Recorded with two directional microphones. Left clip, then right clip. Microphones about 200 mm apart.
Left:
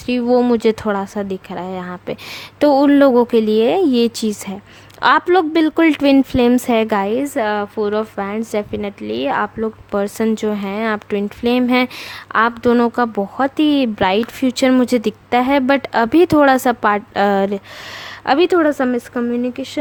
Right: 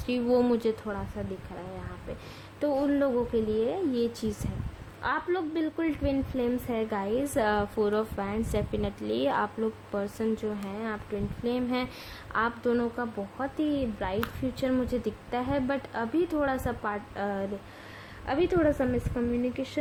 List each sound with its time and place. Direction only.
0.0 s a woman's voice: 30° left (ahead or behind)
4.9 s a woman's voice: 45° left (ahead or behind); by 9.5 s 25° left (ahead or behind)
9.9 s a woman's voice: 35° left (ahead or behind)